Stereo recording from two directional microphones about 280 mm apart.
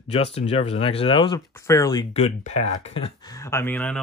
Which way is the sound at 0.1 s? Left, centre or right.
Left.